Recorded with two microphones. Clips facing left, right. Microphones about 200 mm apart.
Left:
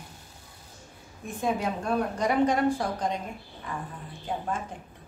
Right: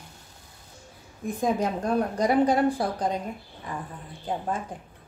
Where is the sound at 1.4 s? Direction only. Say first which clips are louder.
Right 3 dB; 40° right (ahead or behind).